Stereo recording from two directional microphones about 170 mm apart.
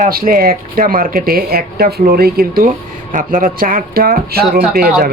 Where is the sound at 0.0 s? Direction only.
60° right (ahead or behind).